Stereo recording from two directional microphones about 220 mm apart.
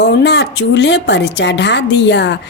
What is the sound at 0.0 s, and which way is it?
A woman's voice, 50° left (ahead or behind).